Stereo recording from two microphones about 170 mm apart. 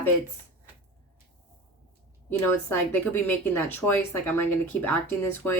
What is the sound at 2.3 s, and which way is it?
Speech, 15° left (ahead or behind).